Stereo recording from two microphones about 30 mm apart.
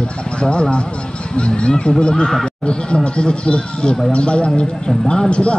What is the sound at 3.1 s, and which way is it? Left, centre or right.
Speech, left.